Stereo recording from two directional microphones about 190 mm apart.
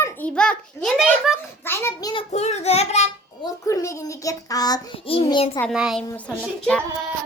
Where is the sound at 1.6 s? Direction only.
10° left (ahead or behind).